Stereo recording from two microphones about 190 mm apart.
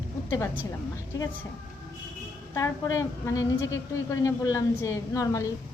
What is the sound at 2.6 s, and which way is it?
A woman's voice, 15° left (ahead or behind).